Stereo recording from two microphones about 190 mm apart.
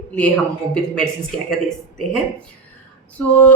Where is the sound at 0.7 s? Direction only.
5° left (ahead or behind).